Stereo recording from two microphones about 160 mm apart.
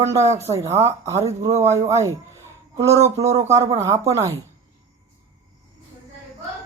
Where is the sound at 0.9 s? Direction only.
20° right (ahead or behind).